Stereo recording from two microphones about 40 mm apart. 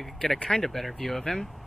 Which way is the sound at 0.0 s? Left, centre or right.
Centre.